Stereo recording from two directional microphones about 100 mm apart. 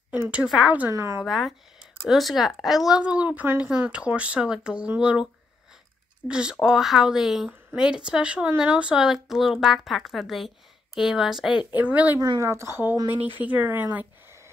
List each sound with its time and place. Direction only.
0.1 s speech: 15° right (ahead or behind)
0.8 s speech: 30° right (ahead or behind)
1.2 s a woman's voice: 5° right (ahead or behind)
3.0 s a woman's voice: 15° right (ahead or behind)
11.7 s speech: 15° right (ahead or behind)
12.4 s speech: 25° right (ahead or behind)